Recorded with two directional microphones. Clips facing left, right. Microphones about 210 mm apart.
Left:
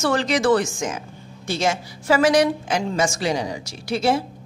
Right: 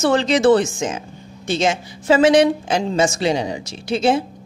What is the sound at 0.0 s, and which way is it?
Speech, 25° right (ahead or behind).